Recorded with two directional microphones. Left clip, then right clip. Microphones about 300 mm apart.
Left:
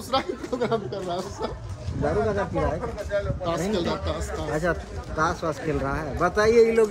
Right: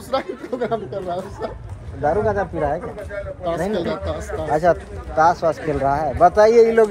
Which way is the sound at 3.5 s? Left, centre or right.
Centre.